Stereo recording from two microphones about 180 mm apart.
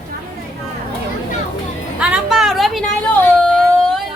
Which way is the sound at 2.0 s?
5° right (ahead or behind).